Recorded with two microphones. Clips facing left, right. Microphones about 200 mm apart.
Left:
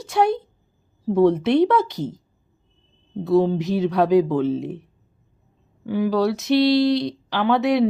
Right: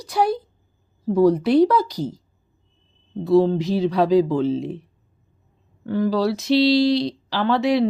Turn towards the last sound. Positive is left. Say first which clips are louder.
# even
turn(degrees=0)  # may be behind; listen again after turning